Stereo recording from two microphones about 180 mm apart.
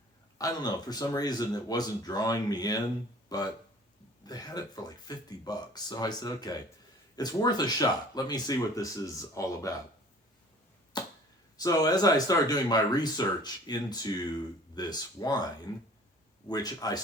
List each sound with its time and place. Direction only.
0.3 s speech: 20° left (ahead or behind)
10.9 s arrow: 25° left (ahead or behind)
11.5 s speech: 20° left (ahead or behind)
16.5 s speech: 20° left (ahead or behind)